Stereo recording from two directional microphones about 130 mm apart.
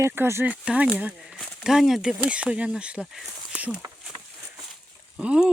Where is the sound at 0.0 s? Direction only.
20° right (ahead or behind).